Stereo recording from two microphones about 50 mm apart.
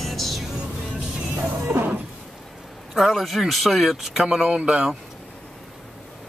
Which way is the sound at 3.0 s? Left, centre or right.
Centre.